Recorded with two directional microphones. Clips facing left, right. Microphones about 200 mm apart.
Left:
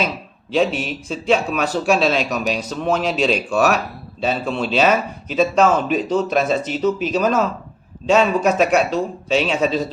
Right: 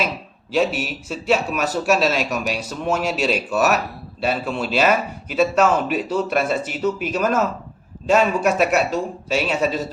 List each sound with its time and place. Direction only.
0.5 s a man's voice: 5° right (ahead or behind)